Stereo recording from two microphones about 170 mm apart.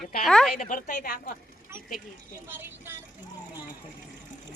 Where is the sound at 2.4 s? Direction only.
10° right (ahead or behind).